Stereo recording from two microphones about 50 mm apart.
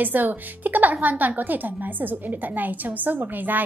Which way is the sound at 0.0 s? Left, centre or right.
Right.